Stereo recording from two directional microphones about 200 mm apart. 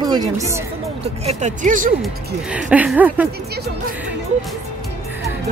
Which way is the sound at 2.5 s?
5° right (ahead or behind).